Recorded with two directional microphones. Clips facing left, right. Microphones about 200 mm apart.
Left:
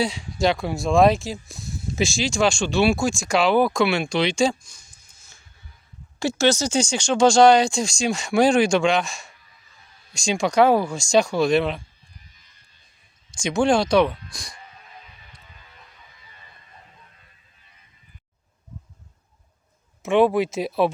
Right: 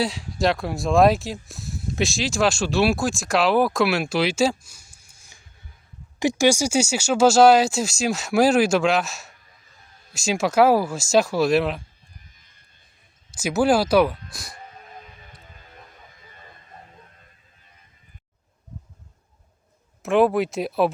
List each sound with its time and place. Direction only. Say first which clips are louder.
0.0 s speech: left 1 dB; centre (ahead or behind)
12.4 s a sound: even; 50° right (ahead or behind)
13.3 s speech: even; 5° right (ahead or behind)
14.5 s music: right 4 dB; 45° right (ahead or behind)
20.0 s speech: even; centre (ahead or behind)